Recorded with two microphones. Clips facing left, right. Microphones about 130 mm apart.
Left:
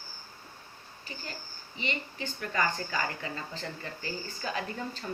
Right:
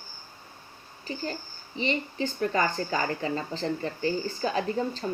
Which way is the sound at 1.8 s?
35° right (ahead or behind).